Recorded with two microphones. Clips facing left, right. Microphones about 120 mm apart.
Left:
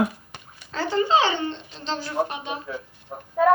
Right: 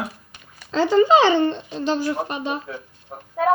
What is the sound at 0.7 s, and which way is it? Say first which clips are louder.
Speech: right 8 dB; 90° right.